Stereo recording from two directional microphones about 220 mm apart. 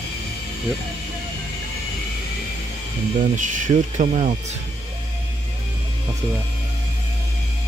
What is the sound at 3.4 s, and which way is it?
Speech, 35° right (ahead or behind).